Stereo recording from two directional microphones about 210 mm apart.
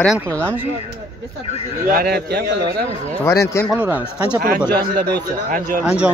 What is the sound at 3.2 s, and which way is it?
Speech, 15° left (ahead or behind).